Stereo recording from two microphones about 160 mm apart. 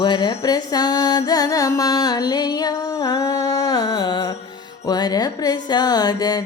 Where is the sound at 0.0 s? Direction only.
30° left (ahead or behind).